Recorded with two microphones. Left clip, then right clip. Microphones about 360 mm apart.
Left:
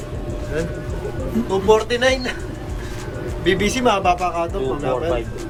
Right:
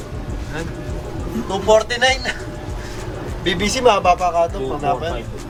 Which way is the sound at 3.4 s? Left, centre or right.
Centre.